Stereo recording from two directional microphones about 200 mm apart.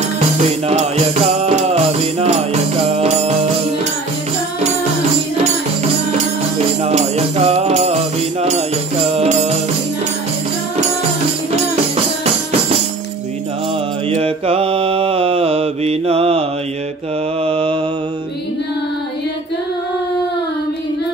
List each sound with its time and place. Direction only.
0.4 s music: 35° right (ahead or behind)
6.8 s music: 30° right (ahead or behind)
14.2 s mantra: 30° right (ahead or behind)
17.5 s mantra: 25° right (ahead or behind)